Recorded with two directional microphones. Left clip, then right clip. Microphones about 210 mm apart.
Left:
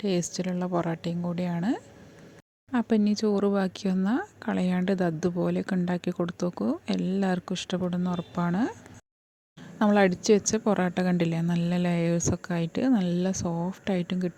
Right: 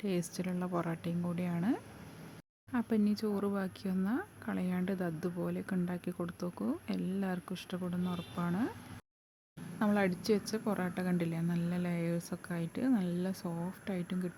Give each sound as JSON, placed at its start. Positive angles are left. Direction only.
{"t": 0.0, "sound": "speech", "side_deg": 25}
{"t": 9.7, "sound": "a woman's voice", "side_deg": 30}